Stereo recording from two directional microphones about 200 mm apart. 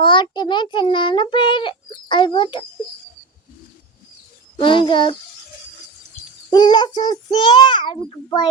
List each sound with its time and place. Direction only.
0.0 s a child's voice: 20° left (ahead or behind)
4.6 s a child's voice: 25° left (ahead or behind)
6.5 s a child's voice: 20° left (ahead or behind)